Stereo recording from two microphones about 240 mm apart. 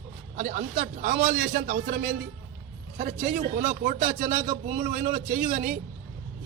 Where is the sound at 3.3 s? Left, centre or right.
Right.